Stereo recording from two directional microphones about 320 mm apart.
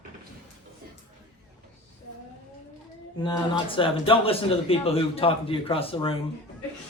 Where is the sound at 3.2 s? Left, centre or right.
Centre.